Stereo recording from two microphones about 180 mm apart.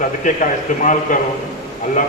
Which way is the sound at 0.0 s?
45° left (ahead or behind).